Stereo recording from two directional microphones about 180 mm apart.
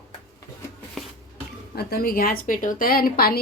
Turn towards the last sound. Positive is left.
turn(degrees=55)  # may be behind; listen again after turning